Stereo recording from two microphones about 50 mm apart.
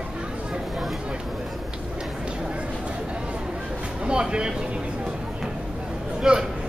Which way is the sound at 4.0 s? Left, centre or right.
Centre.